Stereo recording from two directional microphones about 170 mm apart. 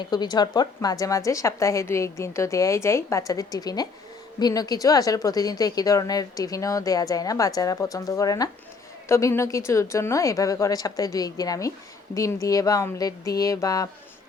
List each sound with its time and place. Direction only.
0.0 s a woman's voice: 25° left (ahead or behind)